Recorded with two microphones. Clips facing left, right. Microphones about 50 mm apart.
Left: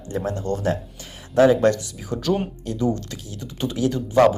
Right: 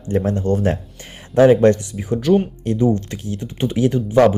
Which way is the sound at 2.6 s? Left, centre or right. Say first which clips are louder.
Right 6 dB; right.